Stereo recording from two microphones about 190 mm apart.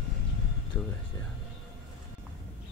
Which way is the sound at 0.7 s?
10° left (ahead or behind).